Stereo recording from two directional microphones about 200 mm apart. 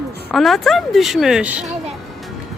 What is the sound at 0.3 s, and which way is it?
Speech, centre (ahead or behind).